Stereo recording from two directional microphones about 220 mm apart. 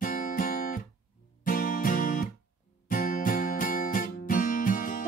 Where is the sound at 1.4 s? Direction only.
40° left (ahead or behind).